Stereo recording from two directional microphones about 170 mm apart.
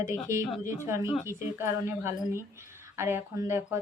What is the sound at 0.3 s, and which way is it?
Speech, 15° right (ahead or behind).